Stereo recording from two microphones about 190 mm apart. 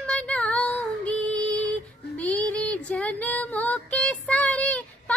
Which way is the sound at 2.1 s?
5° left (ahead or behind).